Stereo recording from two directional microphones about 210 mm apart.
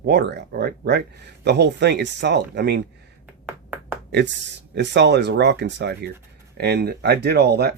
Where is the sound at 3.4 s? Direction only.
10° right (ahead or behind).